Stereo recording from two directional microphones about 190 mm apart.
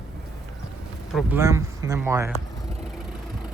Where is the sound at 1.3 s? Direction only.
15° right (ahead or behind).